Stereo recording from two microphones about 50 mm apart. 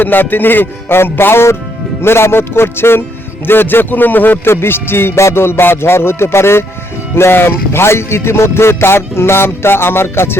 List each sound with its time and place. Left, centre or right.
0.0 s music: left
3.4 s speech: left
4.4 s music: left